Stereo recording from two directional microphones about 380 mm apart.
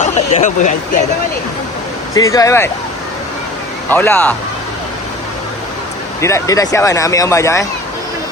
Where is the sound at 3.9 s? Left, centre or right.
Centre.